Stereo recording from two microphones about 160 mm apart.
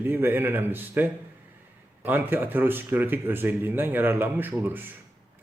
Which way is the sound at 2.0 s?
10° right (ahead or behind).